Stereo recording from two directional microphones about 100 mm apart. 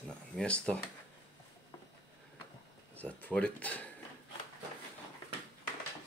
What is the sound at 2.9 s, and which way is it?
Speech, 15° left (ahead or behind).